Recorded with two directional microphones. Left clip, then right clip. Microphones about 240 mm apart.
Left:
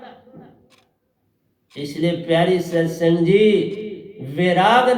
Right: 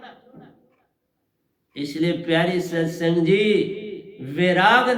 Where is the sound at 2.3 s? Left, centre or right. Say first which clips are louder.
Left 5 dB; right.